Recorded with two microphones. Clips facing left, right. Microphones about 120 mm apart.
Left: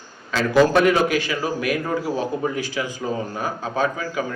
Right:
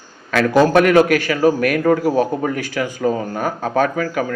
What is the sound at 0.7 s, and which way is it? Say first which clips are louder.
Speech: right 5 dB; 55° right (ahead or behind).